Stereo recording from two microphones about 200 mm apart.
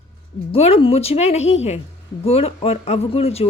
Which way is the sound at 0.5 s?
30° left (ahead or behind).